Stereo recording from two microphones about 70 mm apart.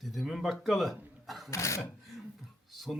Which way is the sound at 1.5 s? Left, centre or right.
Left.